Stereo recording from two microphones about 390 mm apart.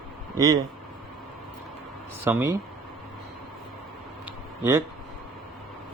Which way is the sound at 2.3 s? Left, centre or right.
Centre.